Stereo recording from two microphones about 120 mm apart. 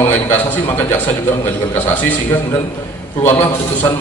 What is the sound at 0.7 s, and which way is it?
Speech, 20° left (ahead or behind).